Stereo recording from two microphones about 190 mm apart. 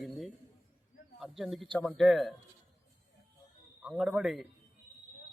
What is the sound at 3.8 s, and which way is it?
Speech, 5° right (ahead or behind).